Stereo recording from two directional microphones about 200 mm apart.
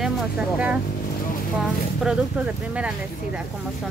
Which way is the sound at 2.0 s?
5° right (ahead or behind).